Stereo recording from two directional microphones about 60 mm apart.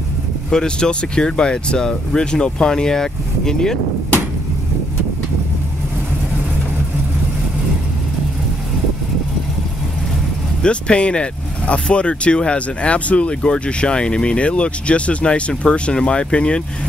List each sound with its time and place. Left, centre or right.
0.5 s speech: centre
10.6 s speech: centre